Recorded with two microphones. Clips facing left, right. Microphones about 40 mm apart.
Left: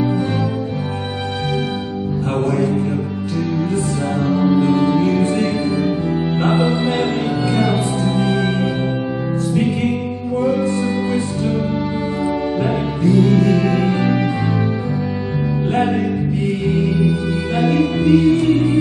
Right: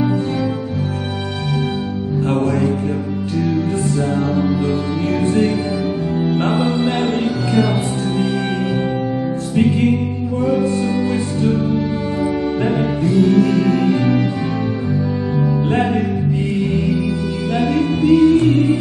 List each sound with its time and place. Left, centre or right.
4.4 s music: left
6.3 s music: left
12.6 s music: left
17.0 s music: left